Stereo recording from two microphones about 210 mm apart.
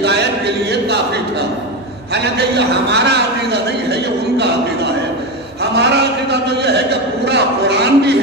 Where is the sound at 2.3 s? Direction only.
50° right (ahead or behind).